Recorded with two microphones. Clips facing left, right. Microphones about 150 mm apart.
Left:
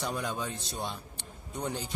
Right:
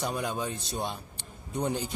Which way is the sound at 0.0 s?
15° right (ahead or behind).